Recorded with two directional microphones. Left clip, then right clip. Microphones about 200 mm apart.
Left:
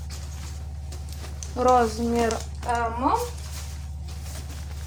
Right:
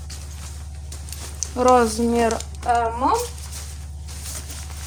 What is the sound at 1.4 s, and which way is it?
Speech, 45° right (ahead or behind).